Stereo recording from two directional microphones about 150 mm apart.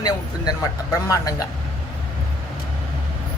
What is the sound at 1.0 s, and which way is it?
Speech, 25° left (ahead or behind).